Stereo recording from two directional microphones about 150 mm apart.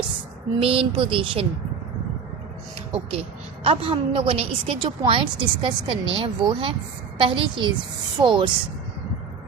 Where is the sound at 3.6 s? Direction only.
35° right (ahead or behind).